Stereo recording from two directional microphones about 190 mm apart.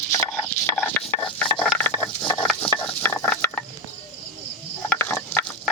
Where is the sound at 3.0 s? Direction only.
10° left (ahead or behind).